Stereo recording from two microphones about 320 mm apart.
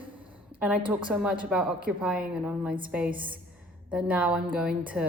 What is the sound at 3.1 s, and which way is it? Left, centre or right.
Speech, centre.